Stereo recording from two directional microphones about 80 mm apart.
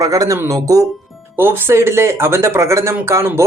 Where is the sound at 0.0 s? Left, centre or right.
Right.